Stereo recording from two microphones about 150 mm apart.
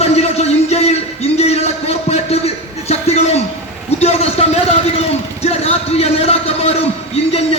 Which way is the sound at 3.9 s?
45° left (ahead or behind).